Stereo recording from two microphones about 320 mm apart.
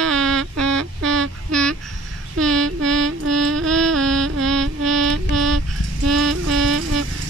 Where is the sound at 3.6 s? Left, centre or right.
Centre.